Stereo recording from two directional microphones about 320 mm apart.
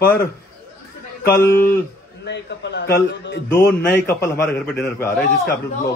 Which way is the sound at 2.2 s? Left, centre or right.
Left.